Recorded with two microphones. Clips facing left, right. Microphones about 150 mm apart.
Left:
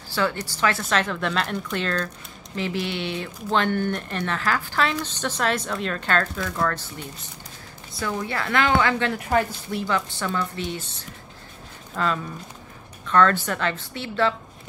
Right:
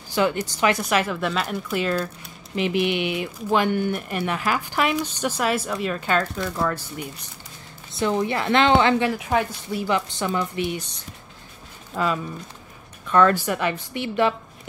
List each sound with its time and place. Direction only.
0.1 s speech: 15° right (ahead or behind)
7.9 s a woman's voice: 20° right (ahead or behind)
9.0 s speech: 5° right (ahead or behind)
9.8 s speech: 20° right (ahead or behind)